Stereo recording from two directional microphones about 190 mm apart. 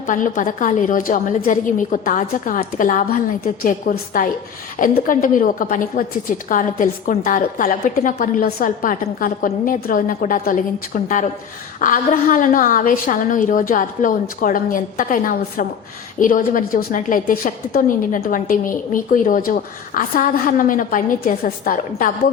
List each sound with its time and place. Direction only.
0.0 s a woman's voice: 45° left (ahead or behind)